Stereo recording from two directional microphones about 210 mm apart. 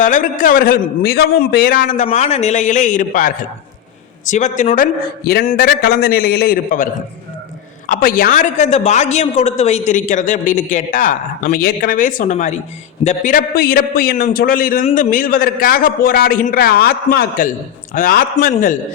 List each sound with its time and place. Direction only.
0.0 s a woman's voice: 40° left (ahead or behind)
7.9 s a woman's voice: 45° left (ahead or behind)